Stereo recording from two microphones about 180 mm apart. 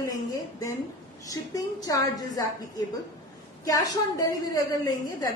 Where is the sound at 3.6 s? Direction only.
20° left (ahead or behind).